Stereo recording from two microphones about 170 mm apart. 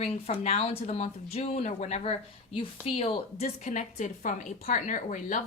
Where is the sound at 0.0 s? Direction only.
40° left (ahead or behind).